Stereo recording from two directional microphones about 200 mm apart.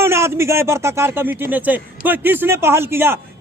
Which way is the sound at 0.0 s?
15° right (ahead or behind).